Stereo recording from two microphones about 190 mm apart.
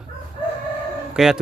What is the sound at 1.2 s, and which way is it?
Speech, 5° right (ahead or behind).